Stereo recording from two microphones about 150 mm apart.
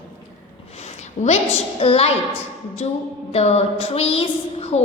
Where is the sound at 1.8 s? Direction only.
40° left (ahead or behind).